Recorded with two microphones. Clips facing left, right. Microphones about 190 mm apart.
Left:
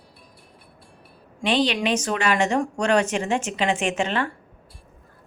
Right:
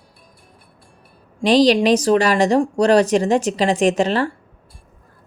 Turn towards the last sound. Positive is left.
turn(degrees=-35)  # may be behind; listen again after turning